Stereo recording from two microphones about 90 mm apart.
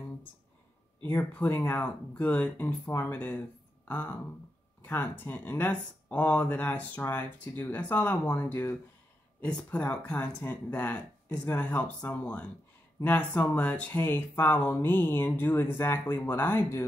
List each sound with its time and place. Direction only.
1.0 s speech: 20° left (ahead or behind)
9.4 s speech: 10° left (ahead or behind)